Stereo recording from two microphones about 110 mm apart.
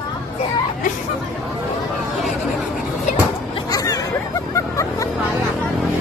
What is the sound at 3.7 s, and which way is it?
Hubbub, 35° left (ahead or behind).